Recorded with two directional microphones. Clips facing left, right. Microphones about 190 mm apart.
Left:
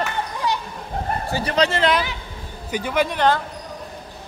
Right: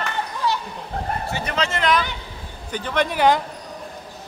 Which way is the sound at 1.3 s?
35° left (ahead or behind).